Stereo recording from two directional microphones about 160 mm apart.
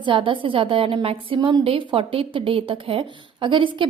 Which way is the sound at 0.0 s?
30° right (ahead or behind).